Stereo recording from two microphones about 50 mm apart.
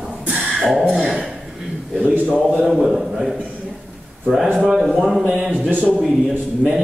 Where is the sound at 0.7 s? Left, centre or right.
Centre.